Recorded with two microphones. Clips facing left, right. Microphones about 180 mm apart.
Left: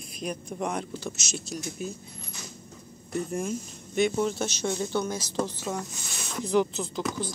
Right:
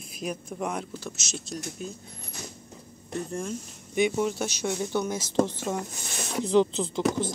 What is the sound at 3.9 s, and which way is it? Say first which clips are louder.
Speech: even; 10° right (ahead or behind).